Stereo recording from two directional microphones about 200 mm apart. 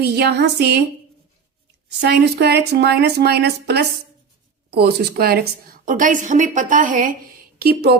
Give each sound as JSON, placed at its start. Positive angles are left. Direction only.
{"t": 0.0, "sound": "a woman's voice", "side_deg": -55}
{"t": 2.0, "sound": "a woman's voice", "side_deg": -55}
{"t": 7.6, "sound": "a woman's voice", "side_deg": -50}